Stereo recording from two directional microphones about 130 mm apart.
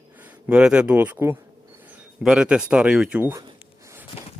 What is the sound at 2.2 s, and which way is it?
Speech, 5° right (ahead or behind).